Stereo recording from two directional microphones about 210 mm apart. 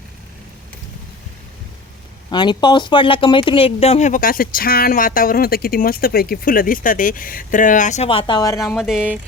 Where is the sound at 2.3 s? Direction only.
20° left (ahead or behind).